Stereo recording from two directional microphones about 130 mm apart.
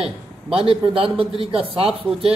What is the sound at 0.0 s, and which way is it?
A man's voice, 45° right (ahead or behind).